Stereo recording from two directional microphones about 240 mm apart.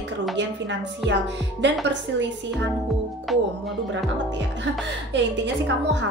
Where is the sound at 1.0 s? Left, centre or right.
Right.